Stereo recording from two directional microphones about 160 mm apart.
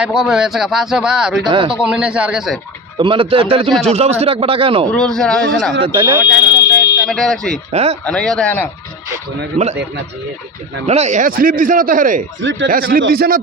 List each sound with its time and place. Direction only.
0.0 s speech: 5° right (ahead or behind)
1.5 s speech: 30° right (ahead or behind)
1.7 s speech: 5° right (ahead or behind)
3.0 s speech: 30° right (ahead or behind)
4.9 s speech: 5° left (ahead or behind)
5.8 s speech: 30° right (ahead or behind)
6.2 s fire alarm: 25° left (ahead or behind)
7.1 s speech: 5° left (ahead or behind)
7.7 s speech: 40° right (ahead or behind)
8.0 s a man's voice: 5° left (ahead or behind)
10.8 s a man's voice: 45° right (ahead or behind); by 13.4 s 75° right (ahead or behind)